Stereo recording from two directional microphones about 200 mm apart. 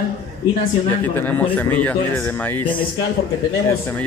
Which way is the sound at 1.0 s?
10° left (ahead or behind).